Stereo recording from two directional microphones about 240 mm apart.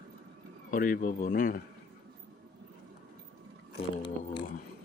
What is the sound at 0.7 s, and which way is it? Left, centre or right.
Speech, left.